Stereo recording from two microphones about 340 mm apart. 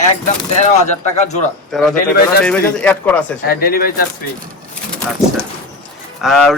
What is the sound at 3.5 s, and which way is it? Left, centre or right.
Speech, left.